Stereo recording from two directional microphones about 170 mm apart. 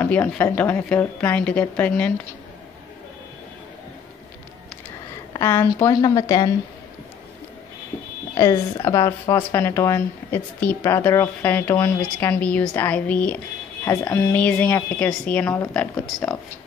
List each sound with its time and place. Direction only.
0.0 s speech: 10° left (ahead or behind)
5.3 s a woman's voice: 15° left (ahead or behind)
8.4 s speech: 20° left (ahead or behind)